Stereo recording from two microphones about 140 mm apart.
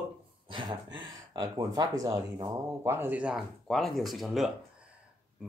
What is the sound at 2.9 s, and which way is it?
Speech, 10° right (ahead or behind).